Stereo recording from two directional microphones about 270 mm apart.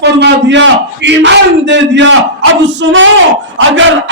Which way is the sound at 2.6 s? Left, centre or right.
Right.